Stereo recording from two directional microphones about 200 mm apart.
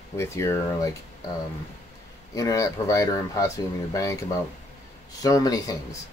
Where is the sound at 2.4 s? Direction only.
15° left (ahead or behind).